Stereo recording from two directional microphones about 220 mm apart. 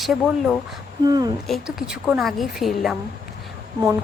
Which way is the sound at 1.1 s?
15° right (ahead or behind).